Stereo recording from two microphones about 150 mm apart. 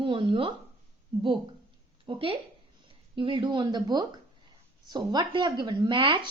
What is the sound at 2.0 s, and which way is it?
A woman's voice, 35° right (ahead or behind).